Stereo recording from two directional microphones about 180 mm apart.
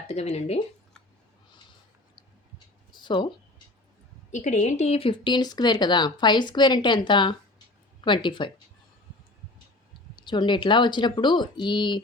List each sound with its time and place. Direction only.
0.1 s speech: 35° left (ahead or behind)
2.9 s a sound: 25° left (ahead or behind)
4.4 s speech: 40° left (ahead or behind)
10.2 s speech: 25° left (ahead or behind)